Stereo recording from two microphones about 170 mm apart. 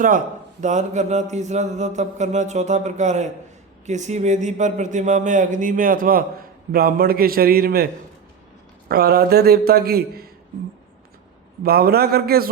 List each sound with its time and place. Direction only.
0.6 s mantra: 45° right (ahead or behind)
6.7 s a man's voice: 60° right (ahead or behind)
8.9 s a man's voice: 65° right (ahead or behind)
11.6 s a man's voice: 65° right (ahead or behind)